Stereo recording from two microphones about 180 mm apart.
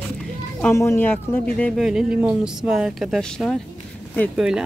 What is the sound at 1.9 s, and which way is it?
Speech, 5° right (ahead or behind).